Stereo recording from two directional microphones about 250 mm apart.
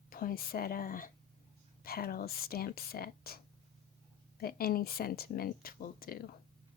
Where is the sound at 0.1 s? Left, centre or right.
Left.